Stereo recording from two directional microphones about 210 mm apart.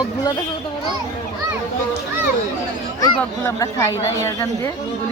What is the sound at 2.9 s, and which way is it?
Speech, 15° left (ahead or behind).